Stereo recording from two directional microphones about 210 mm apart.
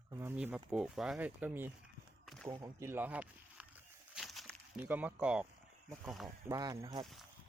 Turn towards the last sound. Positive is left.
turn(degrees=0)  # may be behind; listen again after turning